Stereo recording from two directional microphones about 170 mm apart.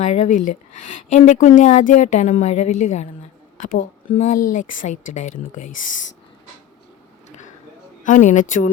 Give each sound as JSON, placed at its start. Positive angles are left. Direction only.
{"t": 0.0, "sound": "speech", "side_deg": 45}
{"t": 7.3, "sound": "a sound", "side_deg": 45}
{"t": 8.0, "sound": "speech", "side_deg": 50}